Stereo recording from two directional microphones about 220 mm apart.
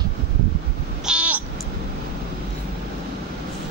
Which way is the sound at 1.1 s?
5° right (ahead or behind).